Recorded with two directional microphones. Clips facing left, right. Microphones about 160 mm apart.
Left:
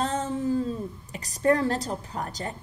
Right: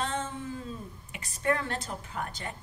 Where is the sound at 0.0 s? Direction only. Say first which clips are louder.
Left 7 dB; 40° left (ahead or behind).